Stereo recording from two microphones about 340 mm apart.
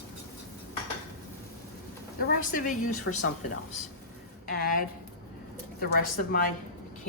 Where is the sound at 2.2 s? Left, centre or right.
Left.